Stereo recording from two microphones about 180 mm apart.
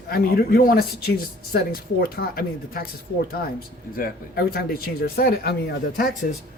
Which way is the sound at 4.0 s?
60° left (ahead or behind).